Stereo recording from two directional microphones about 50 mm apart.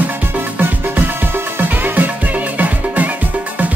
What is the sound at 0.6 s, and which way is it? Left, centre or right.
Music, right.